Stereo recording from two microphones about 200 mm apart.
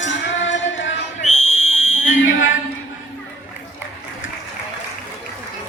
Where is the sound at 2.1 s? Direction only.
70° left (ahead or behind).